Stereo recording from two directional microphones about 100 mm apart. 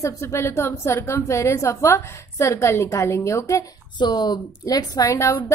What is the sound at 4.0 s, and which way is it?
Speech, 45° left (ahead or behind).